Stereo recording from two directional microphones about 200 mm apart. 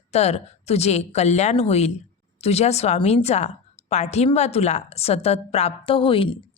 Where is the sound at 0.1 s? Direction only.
35° left (ahead or behind).